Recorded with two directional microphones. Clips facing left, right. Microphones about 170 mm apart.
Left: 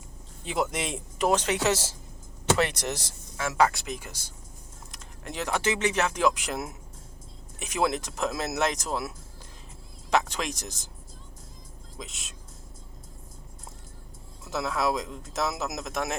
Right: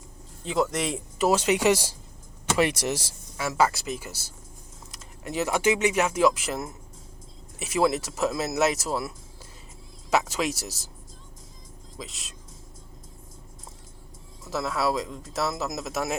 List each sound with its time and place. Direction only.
0.4 s speech: centre (ahead or behind)
11.9 s speech: centre (ahead or behind)
14.4 s speech: centre (ahead or behind)